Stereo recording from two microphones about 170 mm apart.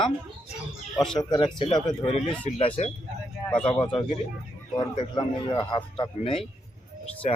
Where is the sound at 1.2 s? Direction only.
25° left (ahead or behind).